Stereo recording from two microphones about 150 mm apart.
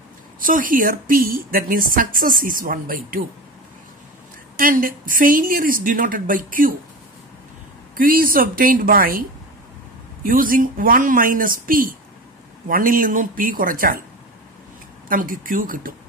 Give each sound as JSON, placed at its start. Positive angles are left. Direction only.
{"t": 0.4, "sound": "a woman's voice", "side_deg": -65}
{"t": 4.6, "sound": "a woman's voice", "side_deg": -70}
{"t": 8.0, "sound": "a woman's voice", "side_deg": -70}
{"t": 10.2, "sound": "a woman's voice", "side_deg": -70}
{"t": 15.0, "sound": "a woman's voice", "side_deg": -65}